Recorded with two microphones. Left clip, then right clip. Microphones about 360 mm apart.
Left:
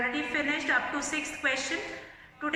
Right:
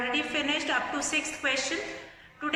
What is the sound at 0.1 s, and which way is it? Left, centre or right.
A woman's voice, centre.